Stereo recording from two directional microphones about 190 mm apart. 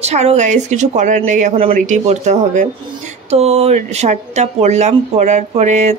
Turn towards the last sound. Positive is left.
turn(degrees=-40)  # may be behind; listen again after turning